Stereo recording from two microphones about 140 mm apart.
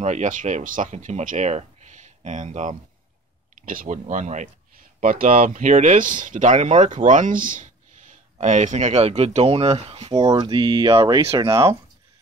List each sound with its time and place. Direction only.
0.0 s speech: 60° right (ahead or behind)
3.6 s speech: 70° right (ahead or behind)
5.0 s speech: 75° right (ahead or behind); by 10.2 s 45° right (ahead or behind)
10.2 s speech: 30° right (ahead or behind)